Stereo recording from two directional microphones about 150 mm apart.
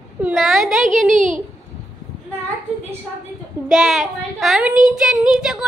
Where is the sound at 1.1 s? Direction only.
55° right (ahead or behind).